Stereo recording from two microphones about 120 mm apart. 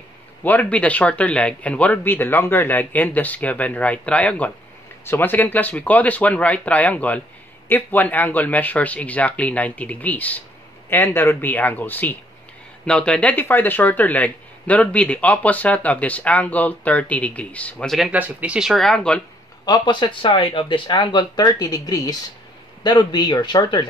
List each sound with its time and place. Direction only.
0.4 s speech: 15° left (ahead or behind)
18.1 s speech: 10° right (ahead or behind); by 19.2 s 5° left (ahead or behind)
19.6 s speech: 35° left (ahead or behind)